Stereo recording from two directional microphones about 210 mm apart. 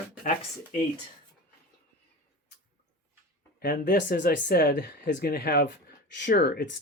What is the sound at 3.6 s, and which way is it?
Speech, 45° left (ahead or behind).